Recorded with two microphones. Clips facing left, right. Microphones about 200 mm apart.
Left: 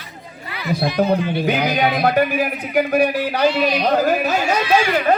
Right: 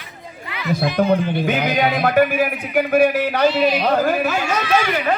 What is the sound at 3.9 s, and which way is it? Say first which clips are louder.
Carnatic music: left 1 dB; 40° left (ahead or behind).